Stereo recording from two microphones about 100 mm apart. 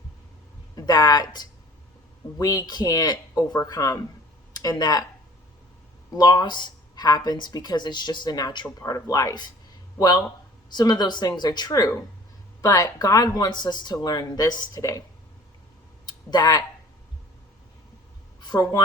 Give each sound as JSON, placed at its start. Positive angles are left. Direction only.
{"t": 0.9, "sound": "speech", "side_deg": 40}
{"t": 6.1, "sound": "speech", "side_deg": 45}
{"t": 10.8, "sound": "speech", "side_deg": 45}
{"t": 14.8, "sound": "speech", "side_deg": 30}
{"t": 16.0, "sound": "speech", "side_deg": 40}
{"t": 18.3, "sound": "a sound", "side_deg": 45}